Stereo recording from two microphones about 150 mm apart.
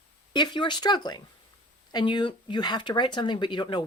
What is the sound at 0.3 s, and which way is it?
Speech, 30° left (ahead or behind).